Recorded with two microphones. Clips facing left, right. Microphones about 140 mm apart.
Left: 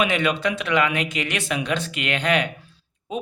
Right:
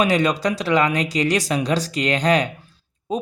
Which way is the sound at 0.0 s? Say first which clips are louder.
Right 3 dB; 40° right (ahead or behind).